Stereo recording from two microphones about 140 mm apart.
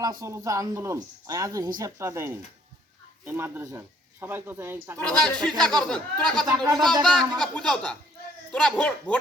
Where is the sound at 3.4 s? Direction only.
20° right (ahead or behind).